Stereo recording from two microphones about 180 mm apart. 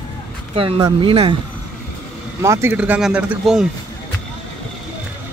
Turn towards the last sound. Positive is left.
turn(degrees=-5)  # may be behind; listen again after turning